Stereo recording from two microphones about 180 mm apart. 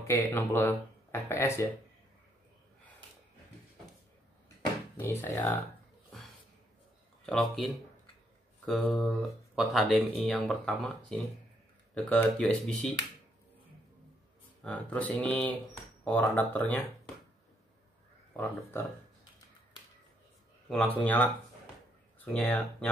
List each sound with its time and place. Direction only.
0.0 s speech: 15° left (ahead or behind)
4.9 s speech: 10° left (ahead or behind)
7.2 s speech: centre (ahead or behind)
14.6 s speech: 5° left (ahead or behind)
18.3 s speech: 10° left (ahead or behind)
20.6 s speech: 5° left (ahead or behind)